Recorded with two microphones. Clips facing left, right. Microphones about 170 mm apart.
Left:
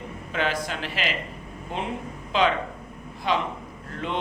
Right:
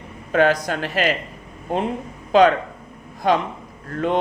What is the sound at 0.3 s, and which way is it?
Speech, 45° right (ahead or behind).